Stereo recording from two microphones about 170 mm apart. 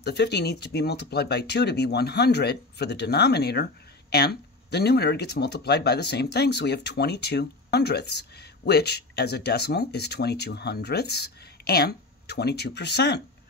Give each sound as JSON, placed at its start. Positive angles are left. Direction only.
{"t": 0.0, "sound": "speech", "side_deg": 75}